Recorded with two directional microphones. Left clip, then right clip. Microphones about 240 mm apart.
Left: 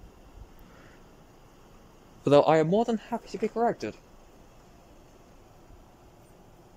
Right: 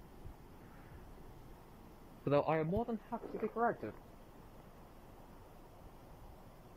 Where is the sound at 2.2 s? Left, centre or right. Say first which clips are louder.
Left 13 dB; left.